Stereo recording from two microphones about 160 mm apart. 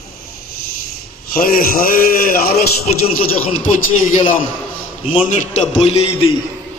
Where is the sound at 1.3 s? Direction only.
65° left (ahead or behind).